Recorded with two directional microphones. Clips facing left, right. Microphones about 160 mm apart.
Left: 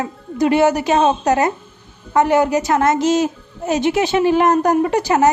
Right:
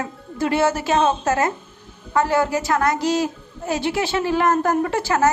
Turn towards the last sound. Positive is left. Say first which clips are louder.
# left 4 dB
turn(degrees=20)  # may be behind; listen again after turning